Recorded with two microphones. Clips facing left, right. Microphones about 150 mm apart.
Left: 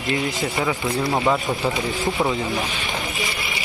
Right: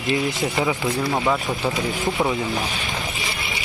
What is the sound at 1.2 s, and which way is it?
Speech, 10° left (ahead or behind).